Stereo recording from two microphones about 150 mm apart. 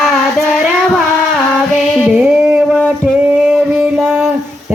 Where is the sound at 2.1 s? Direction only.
5° right (ahead or behind).